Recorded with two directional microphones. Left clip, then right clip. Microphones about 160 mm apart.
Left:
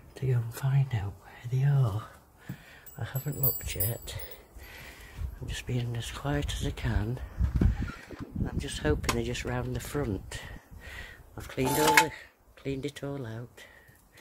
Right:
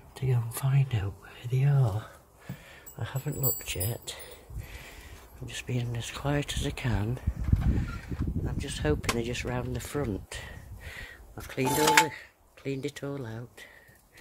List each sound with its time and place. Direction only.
0.1 s speech: 15° right (ahead or behind)
1.8 s speech: centre (ahead or behind)
11.8 s speech: 20° left (ahead or behind)
12.1 s speech: centre (ahead or behind)